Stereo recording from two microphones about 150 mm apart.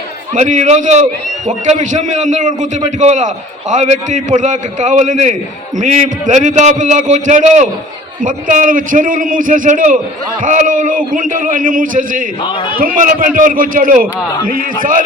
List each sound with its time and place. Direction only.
0.3 s a man's voice: 55° right (ahead or behind)
12.4 s a man's voice: 30° left (ahead or behind)
12.7 s a man's voice: 70° right (ahead or behind)